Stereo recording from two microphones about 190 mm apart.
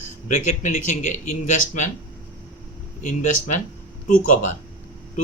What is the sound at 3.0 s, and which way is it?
Speech, 40° left (ahead or behind).